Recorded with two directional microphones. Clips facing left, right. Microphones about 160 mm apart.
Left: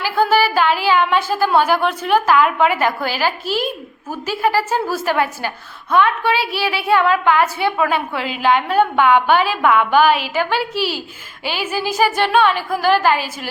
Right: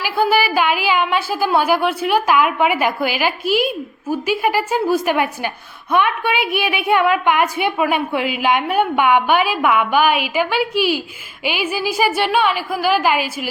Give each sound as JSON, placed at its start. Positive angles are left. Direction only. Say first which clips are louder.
{"t": 0.0, "sound": "a woman's voice", "louder": "left 1 dB", "side_deg": -10}